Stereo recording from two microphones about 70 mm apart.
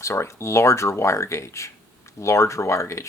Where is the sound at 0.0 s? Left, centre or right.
Left.